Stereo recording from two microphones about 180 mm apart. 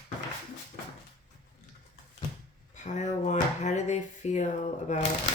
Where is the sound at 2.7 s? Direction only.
40° left (ahead or behind).